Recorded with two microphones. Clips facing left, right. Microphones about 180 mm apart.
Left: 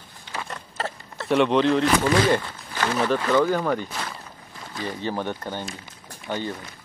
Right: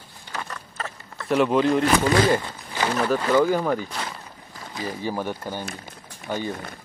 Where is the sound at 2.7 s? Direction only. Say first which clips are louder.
Right 1 dB; 10° right (ahead or behind).